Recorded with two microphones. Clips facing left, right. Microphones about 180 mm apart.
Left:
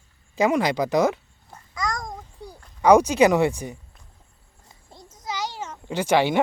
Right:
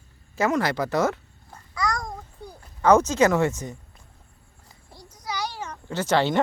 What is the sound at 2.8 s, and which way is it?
Speech, 15° left (ahead or behind).